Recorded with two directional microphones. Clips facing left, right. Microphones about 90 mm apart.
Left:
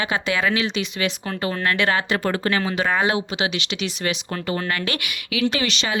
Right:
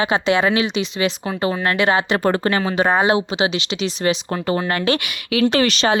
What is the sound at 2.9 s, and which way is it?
Speech, 25° right (ahead or behind).